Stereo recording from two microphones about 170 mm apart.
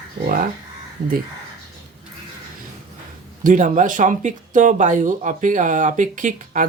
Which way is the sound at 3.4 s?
50° right (ahead or behind).